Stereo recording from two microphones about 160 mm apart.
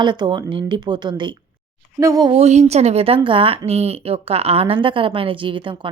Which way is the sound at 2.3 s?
40° right (ahead or behind).